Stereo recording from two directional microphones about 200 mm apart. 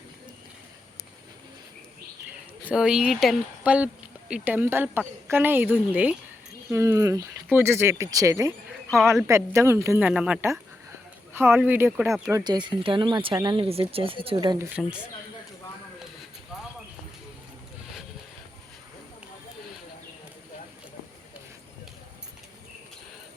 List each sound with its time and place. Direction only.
2.6 s a woman's voice: 5° right (ahead or behind)
8.9 s speech: centre (ahead or behind)
9.2 s a woman's voice: 15° right (ahead or behind)
12.3 s speech: 20° right (ahead or behind)